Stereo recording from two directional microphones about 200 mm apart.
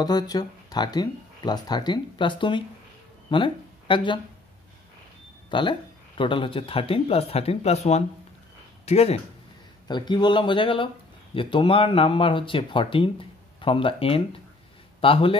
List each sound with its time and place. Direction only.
0.0 s speech: 20° left (ahead or behind)
5.5 s a man's voice: 25° left (ahead or behind)